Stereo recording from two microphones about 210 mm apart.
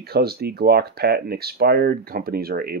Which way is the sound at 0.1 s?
50° right (ahead or behind).